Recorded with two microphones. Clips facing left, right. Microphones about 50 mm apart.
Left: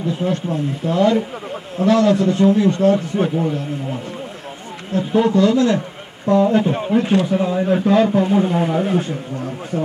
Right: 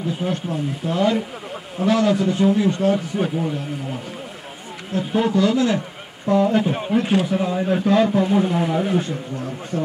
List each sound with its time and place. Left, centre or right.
0.2 s a man's voice: centre
3.2 s a man's voice: centre